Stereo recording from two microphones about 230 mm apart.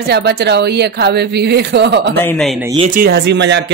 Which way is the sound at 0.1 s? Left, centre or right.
Right.